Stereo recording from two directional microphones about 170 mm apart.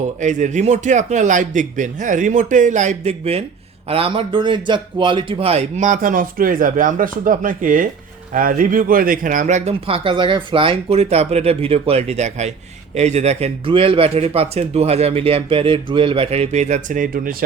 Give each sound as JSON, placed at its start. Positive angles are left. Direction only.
{"t": 0.2, "sound": "a man's voice", "side_deg": -45}